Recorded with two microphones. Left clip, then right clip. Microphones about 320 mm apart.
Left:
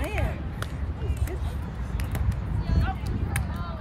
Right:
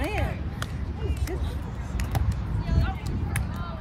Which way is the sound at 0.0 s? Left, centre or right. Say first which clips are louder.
Right 2 dB; right.